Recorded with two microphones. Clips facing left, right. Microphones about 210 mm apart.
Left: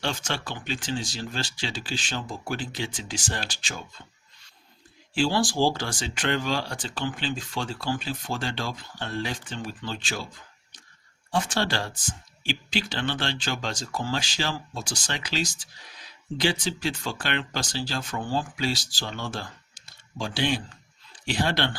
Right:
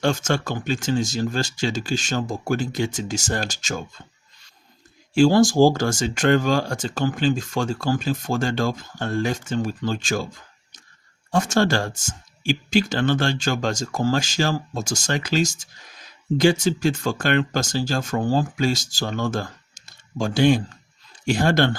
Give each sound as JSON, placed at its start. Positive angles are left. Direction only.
{"t": 0.0, "sound": "speech", "side_deg": -45}
{"t": 5.1, "sound": "speech", "side_deg": -45}
{"t": 11.3, "sound": "speech", "side_deg": -45}